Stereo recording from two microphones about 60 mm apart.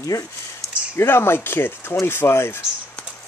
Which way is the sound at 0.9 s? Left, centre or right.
Left.